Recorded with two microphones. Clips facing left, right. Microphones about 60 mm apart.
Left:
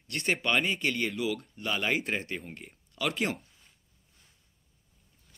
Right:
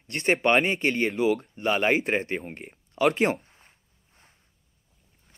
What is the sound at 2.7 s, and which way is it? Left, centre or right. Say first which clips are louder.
Speech: right 10 dB; right.